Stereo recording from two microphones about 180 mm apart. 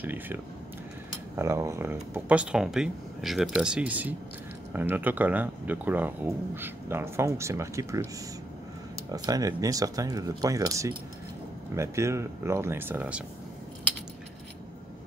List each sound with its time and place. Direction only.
0.0 s speech: 10° right (ahead or behind)
9.1 s speech: 20° right (ahead or behind)